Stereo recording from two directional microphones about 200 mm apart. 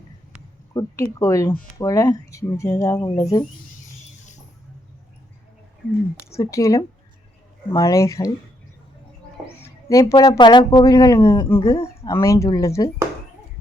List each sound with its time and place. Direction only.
0.7 s speech: 20° left (ahead or behind)
6.4 s speech: 15° left (ahead or behind)
9.6 s speech: 15° left (ahead or behind)